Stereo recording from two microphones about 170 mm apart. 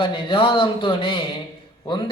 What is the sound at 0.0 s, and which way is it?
A man's voice, 30° left (ahead or behind).